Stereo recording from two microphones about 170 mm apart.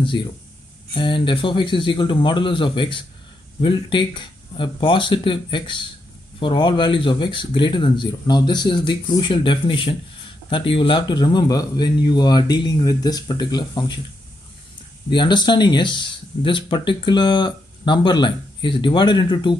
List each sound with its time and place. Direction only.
0.0 s speech: 30° left (ahead or behind)
15.0 s speech: 25° left (ahead or behind)